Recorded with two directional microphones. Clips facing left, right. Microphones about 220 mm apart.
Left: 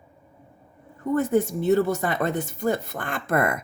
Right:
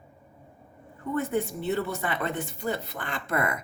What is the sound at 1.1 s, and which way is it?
Speech, 40° left (ahead or behind).